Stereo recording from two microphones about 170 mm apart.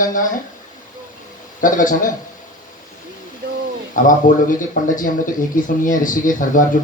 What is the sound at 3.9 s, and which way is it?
Speech, 50° left (ahead or behind).